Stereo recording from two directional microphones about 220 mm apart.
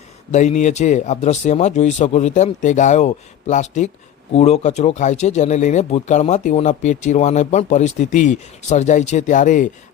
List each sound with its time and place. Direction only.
0.3 s speech: 30° left (ahead or behind)